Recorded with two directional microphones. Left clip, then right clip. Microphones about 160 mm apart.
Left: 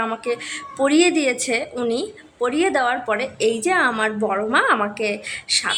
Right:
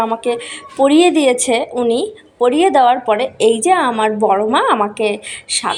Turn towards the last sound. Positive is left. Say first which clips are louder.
# right 2 dB
turn(degrees=-20)  # may be behind; listen again after turning